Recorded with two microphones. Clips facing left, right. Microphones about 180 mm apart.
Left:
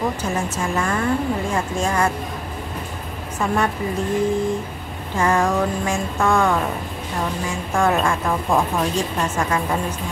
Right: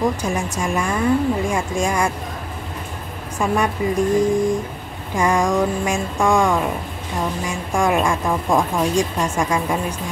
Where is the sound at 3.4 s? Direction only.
10° right (ahead or behind).